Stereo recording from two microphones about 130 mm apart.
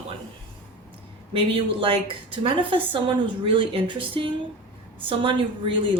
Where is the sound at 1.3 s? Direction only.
45° right (ahead or behind).